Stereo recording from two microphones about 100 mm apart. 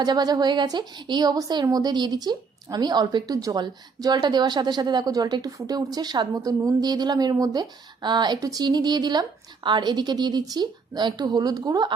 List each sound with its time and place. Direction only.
0.0 s speech: 45° right (ahead or behind)